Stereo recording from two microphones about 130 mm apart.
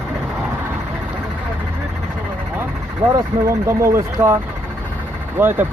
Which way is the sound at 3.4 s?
20° right (ahead or behind).